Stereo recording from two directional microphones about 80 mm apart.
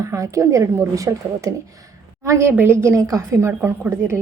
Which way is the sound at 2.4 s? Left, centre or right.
Right.